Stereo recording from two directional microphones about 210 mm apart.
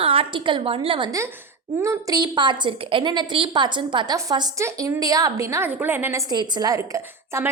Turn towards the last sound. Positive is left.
turn(degrees=-15)  # may be behind; listen again after turning